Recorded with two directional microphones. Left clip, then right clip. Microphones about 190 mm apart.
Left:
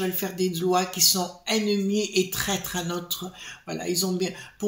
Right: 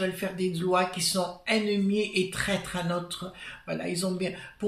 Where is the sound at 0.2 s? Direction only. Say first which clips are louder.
Left 3 dB; 50° left (ahead or behind).